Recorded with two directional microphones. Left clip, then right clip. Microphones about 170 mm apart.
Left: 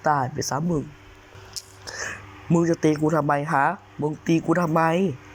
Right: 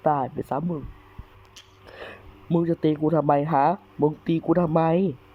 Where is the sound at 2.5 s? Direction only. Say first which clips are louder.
Left 2 dB; 30° right (ahead or behind).